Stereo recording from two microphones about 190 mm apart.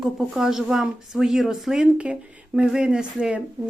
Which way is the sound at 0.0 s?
Centre (ahead or behind).